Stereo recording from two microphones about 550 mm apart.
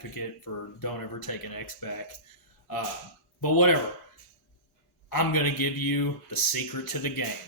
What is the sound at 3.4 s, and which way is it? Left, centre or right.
Speech, left.